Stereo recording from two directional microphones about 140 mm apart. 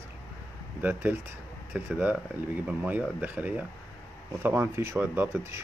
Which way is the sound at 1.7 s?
15° right (ahead or behind).